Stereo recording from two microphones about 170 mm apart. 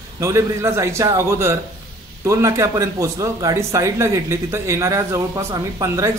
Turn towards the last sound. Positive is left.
turn(degrees=-20)  # may be behind; listen again after turning